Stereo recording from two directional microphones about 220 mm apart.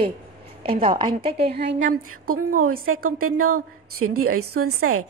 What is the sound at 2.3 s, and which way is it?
A woman's voice, 80° right.